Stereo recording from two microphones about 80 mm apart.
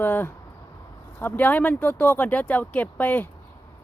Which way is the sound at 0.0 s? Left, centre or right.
Left.